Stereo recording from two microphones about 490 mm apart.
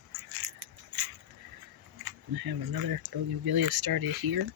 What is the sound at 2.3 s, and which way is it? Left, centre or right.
Speech, right.